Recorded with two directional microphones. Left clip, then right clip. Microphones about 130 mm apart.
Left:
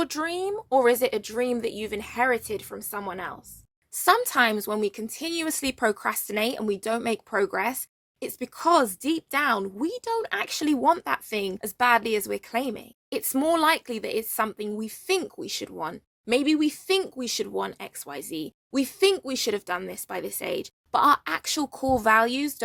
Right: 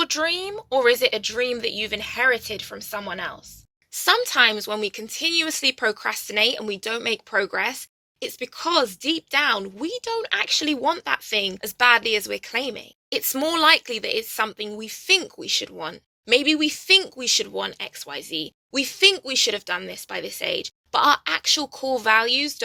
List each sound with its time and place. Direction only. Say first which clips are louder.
0.0 s speech: right 5 dB; 50° left (ahead or behind)
8.2 s speech: left 1 dB; 70° left (ahead or behind)